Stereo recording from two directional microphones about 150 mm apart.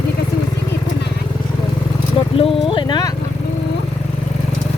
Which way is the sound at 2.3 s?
40° left (ahead or behind).